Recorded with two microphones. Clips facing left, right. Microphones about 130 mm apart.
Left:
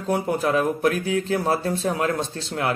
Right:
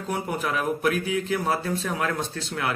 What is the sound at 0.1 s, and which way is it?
Speech, 30° left (ahead or behind).